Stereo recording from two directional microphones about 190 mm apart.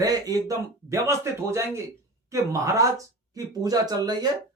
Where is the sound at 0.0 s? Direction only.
20° right (ahead or behind).